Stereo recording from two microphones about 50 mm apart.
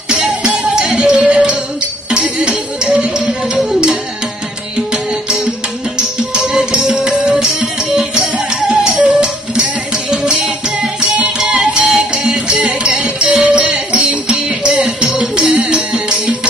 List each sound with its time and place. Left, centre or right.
0.1 s music: centre
8.6 s music: right